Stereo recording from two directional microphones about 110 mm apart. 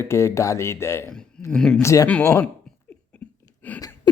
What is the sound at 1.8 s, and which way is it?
Speech, 25° left (ahead or behind).